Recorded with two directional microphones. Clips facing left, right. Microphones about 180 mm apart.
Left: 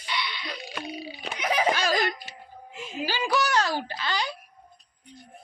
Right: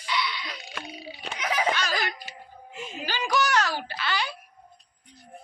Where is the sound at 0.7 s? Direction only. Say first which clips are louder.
Left 4 dB; 5° left (ahead or behind).